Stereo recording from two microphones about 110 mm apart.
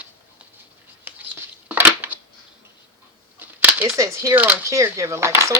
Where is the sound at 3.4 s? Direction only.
15° right (ahead or behind).